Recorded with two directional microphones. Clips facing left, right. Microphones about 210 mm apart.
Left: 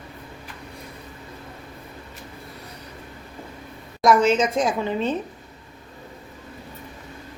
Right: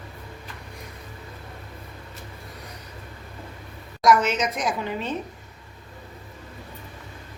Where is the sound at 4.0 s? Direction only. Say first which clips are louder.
Left 3 dB; 30° left (ahead or behind).